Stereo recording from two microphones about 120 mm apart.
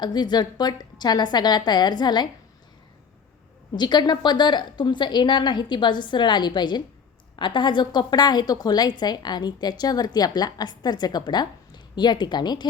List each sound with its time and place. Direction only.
0.0 s a woman's voice: 35° left (ahead or behind)
3.8 s a woman's voice: 35° left (ahead or behind)